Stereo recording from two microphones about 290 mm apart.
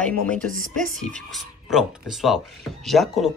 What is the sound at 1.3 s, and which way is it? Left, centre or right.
Speech, centre.